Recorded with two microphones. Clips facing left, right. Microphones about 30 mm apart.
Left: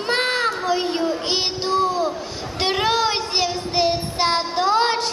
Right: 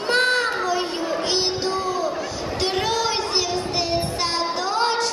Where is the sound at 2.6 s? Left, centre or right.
Left.